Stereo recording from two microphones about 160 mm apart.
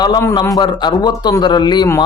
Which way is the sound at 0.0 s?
20° left (ahead or behind).